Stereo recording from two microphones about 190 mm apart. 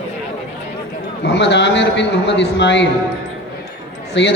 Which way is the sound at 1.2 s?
65° left (ahead or behind).